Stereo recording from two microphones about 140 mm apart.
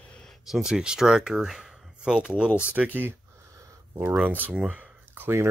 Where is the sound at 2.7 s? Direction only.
10° right (ahead or behind).